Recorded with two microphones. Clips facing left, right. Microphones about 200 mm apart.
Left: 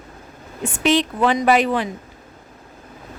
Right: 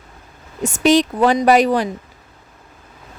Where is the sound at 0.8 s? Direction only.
40° right (ahead or behind).